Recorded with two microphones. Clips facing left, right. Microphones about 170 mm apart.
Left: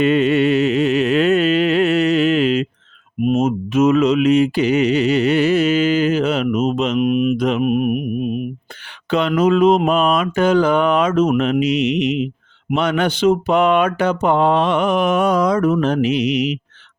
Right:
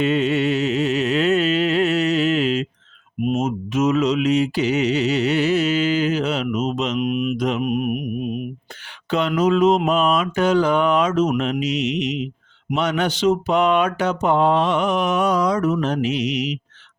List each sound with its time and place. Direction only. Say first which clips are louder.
0.0 s music: left 4 dB; 60° left (ahead or behind)
3.2 s mantra: left 5 dB; 55° left (ahead or behind)
9.0 s mantra: left 3 dB; 65° left (ahead or behind)